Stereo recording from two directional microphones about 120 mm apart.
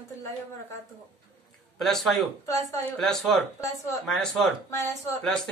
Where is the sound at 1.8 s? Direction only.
Centre (ahead or behind).